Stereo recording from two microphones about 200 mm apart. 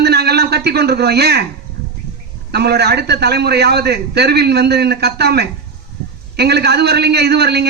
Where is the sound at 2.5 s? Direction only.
55° right (ahead or behind).